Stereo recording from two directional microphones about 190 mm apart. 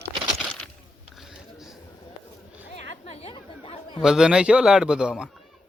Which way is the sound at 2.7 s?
35° left (ahead or behind).